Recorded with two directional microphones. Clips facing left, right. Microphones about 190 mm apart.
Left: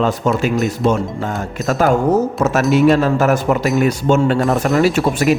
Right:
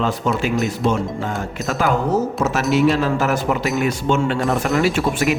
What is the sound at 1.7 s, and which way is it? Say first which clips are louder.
Speech: left 5 dB; 45° left (ahead or behind).